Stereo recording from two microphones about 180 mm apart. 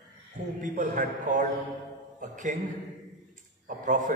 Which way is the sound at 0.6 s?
40° right (ahead or behind).